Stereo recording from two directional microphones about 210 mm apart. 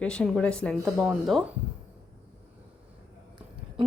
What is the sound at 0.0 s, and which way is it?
Speech, 5° left (ahead or behind).